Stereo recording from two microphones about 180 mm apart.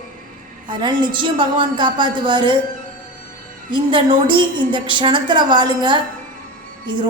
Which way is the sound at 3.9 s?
25° right (ahead or behind).